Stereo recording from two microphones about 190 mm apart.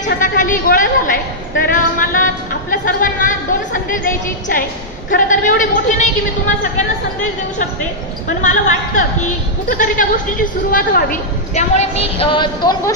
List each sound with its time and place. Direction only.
0.2 s a woman's voice: 45° left (ahead or behind)
5.1 s a woman's voice: 40° left (ahead or behind)
8.4 s a woman's voice: 40° left (ahead or behind); by 12.9 s 25° left (ahead or behind)